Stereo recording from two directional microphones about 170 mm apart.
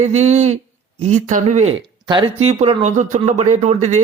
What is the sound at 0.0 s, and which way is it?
Speech, 40° right (ahead or behind).